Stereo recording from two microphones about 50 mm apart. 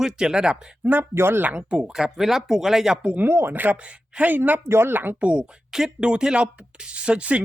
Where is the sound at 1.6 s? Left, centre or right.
Centre.